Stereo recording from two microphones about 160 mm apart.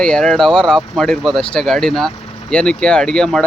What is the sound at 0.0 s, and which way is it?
Speech, 5° left (ahead or behind).